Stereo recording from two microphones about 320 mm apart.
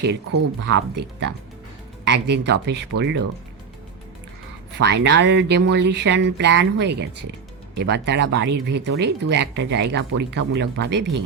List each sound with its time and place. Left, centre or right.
0.3 s speech: right
4.7 s speech: right